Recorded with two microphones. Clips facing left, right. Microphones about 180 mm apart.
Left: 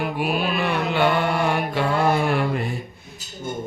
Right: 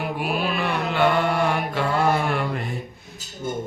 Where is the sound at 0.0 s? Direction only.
Centre (ahead or behind).